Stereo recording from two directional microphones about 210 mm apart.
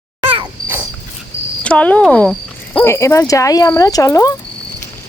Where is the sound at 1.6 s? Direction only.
5° left (ahead or behind).